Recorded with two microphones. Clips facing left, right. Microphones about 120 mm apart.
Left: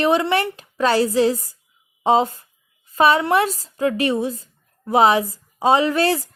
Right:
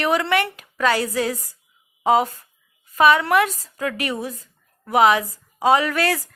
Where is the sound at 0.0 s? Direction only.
25° left (ahead or behind).